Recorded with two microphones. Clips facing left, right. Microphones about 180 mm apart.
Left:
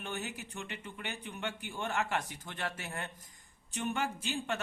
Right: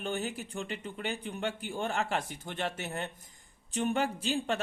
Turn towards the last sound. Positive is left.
turn(degrees=-35)  # may be behind; listen again after turning